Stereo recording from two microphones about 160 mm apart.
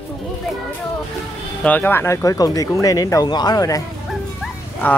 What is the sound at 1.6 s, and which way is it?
Speech, 10° left (ahead or behind).